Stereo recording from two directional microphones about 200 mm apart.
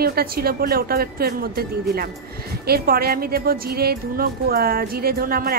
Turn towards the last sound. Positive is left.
turn(degrees=-45)  # may be behind; listen again after turning